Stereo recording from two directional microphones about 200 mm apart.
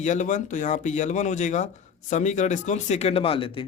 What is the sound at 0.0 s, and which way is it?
Speech, 35° left (ahead or behind).